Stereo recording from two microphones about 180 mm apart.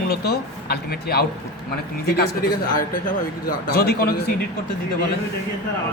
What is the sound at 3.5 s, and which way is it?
Speech, 60° left (ahead or behind).